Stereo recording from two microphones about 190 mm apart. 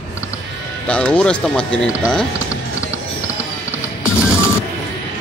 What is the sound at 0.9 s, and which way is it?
Speech, 5° left (ahead or behind).